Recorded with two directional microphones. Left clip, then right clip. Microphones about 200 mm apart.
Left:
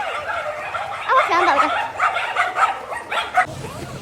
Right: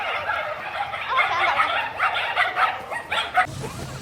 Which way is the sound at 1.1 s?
30° left (ahead or behind).